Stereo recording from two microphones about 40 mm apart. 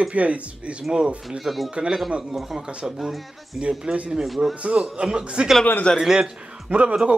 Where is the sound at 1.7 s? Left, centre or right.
Right.